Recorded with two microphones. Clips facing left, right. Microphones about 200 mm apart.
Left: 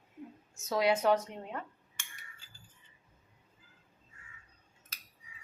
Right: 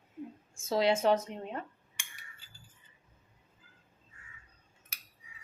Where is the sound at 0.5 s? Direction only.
25° right (ahead or behind).